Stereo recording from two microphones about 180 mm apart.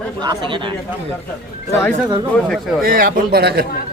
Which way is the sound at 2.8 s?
55° right (ahead or behind).